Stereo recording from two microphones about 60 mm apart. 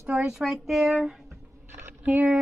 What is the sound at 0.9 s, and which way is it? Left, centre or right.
Speech, centre.